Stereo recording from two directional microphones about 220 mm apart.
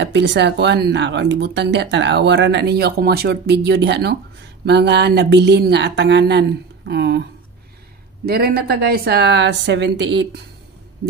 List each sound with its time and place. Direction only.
0.0 s speech: 50° right (ahead or behind)
8.3 s speech: 45° right (ahead or behind)